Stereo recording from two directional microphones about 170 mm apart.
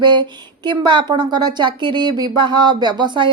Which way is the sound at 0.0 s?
25° right (ahead or behind).